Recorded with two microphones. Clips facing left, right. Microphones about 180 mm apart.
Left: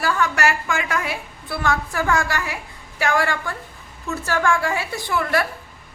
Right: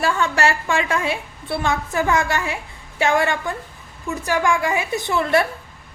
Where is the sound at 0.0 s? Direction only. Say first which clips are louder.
Right 1 dB; 25° right (ahead or behind).